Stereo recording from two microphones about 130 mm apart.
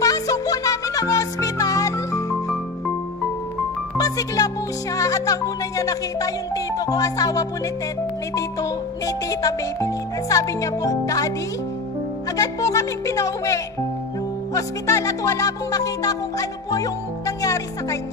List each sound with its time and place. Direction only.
0.0 s music: 25° left (ahead or behind)
4.0 s music: 30° left (ahead or behind)
4.9 s speech: 25° left (ahead or behind)
12.4 s speech: 25° left (ahead or behind)